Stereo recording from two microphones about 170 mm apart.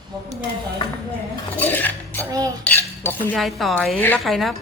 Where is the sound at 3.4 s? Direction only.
Centre (ahead or behind).